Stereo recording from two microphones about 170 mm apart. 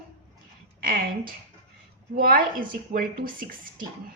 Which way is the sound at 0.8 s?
55° right (ahead or behind).